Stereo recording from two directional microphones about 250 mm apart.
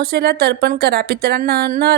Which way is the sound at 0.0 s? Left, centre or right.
Right.